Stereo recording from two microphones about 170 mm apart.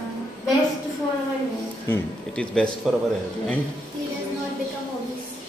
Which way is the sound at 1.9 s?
5° left (ahead or behind).